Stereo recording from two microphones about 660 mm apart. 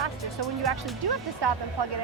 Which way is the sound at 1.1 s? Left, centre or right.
Right.